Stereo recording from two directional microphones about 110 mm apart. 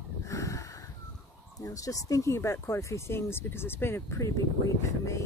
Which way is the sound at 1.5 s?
30° left (ahead or behind).